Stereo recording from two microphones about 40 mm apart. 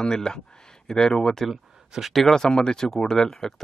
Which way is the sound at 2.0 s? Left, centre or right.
Centre.